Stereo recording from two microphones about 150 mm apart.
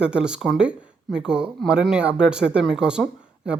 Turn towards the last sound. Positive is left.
turn(degrees=-5)  # may be behind; listen again after turning